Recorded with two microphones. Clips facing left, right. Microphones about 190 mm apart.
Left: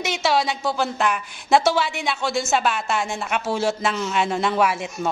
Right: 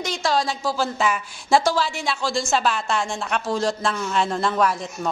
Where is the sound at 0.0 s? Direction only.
5° left (ahead or behind).